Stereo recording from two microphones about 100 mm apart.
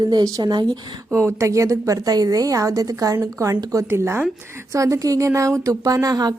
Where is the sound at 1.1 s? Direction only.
30° right (ahead or behind).